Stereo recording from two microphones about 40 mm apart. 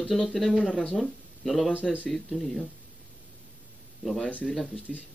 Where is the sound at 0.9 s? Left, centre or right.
Centre.